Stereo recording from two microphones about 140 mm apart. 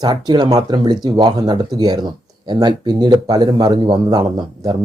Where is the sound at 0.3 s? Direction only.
30° right (ahead or behind).